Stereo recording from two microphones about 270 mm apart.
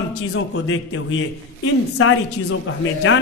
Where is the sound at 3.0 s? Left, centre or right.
Left.